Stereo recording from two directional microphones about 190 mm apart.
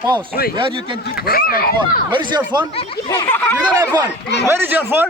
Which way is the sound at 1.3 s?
50° left (ahead or behind).